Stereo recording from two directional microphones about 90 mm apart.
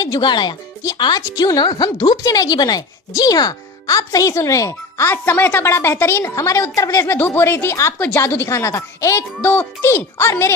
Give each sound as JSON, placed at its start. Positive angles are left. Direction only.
{"t": 0.0, "sound": "speech", "side_deg": 50}
{"t": 7.2, "sound": "speech", "side_deg": 25}
{"t": 9.4, "sound": "speech", "side_deg": 20}